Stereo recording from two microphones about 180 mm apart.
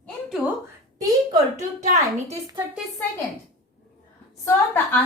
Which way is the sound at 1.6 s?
40° right (ahead or behind).